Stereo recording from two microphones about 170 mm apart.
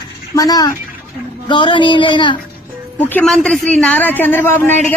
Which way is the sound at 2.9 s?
10° left (ahead or behind).